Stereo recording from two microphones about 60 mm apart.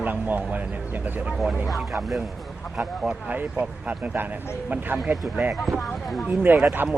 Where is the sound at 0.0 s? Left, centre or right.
Right.